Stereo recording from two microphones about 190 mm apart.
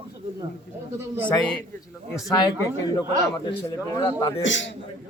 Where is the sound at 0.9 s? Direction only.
10° right (ahead or behind).